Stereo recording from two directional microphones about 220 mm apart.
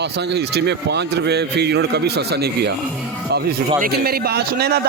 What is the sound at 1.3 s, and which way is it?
Speech, 50° right (ahead or behind).